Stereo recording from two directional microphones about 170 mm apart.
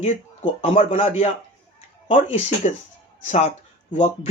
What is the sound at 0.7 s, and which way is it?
Speech, 45° left (ahead or behind).